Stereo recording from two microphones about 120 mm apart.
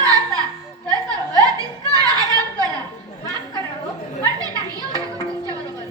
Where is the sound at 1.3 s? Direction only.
30° right (ahead or behind).